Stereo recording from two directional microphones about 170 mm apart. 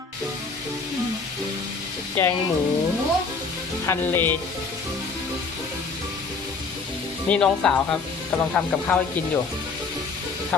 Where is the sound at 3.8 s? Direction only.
15° left (ahead or behind).